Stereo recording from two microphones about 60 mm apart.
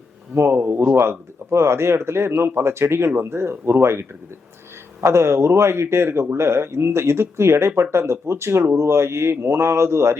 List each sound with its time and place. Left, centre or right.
0.4 s speech: right
5.0 s speech: right